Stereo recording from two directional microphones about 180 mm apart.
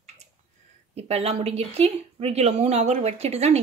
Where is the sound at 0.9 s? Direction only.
35° right (ahead or behind).